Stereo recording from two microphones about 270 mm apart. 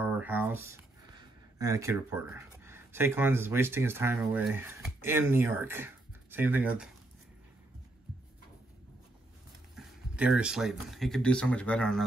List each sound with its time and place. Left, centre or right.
0.0 s speech: centre
9.8 s speech: centre